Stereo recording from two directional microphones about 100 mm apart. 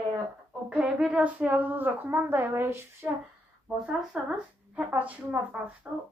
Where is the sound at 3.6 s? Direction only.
5° right (ahead or behind).